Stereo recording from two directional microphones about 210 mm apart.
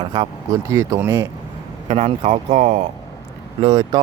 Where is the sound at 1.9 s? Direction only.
30° right (ahead or behind).